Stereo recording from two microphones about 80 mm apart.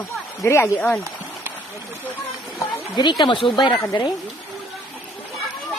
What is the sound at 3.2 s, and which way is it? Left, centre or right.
Speech, left.